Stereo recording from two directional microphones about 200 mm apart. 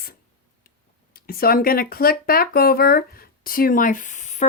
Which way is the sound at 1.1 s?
50° left (ahead or behind).